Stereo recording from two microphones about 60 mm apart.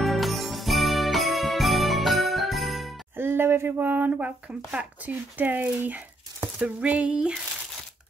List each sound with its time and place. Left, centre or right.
0.0 s jingle bell: centre
3.2 s a sound: right
4.6 s speech: right